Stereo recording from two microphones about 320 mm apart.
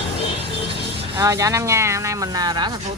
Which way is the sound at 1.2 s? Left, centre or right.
Centre.